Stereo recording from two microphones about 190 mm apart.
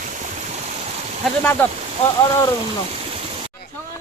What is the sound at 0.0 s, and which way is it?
Stream, 40° right (ahead or behind).